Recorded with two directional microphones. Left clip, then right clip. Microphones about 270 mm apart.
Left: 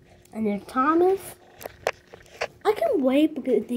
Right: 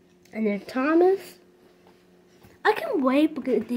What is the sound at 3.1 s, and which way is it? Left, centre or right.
Speech, right.